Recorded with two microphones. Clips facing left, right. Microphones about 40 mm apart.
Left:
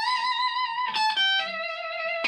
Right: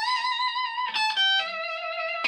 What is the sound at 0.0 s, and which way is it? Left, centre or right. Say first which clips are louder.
Music: left 1 dB; centre.